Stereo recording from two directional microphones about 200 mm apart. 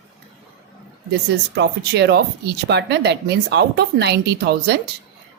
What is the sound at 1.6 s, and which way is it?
Speech, 55° right (ahead or behind).